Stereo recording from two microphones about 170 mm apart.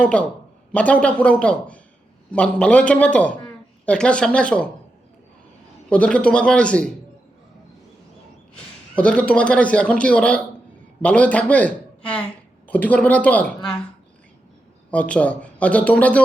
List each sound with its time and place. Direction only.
0.0 s a man's voice: 5° left (ahead or behind)
5.9 s a man's voice: 5° left (ahead or behind)
9.0 s a man's voice: 5° left (ahead or behind)
14.8 s speech: 5° left (ahead or behind)